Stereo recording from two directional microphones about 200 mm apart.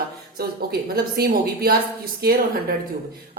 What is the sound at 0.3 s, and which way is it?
A woman's voice, 50° right (ahead or behind).